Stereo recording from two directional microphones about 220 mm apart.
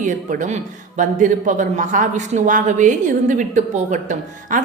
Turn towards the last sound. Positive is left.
turn(degrees=-35)  # may be behind; listen again after turning